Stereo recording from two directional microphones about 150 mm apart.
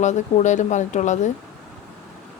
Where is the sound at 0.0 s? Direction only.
50° left (ahead or behind).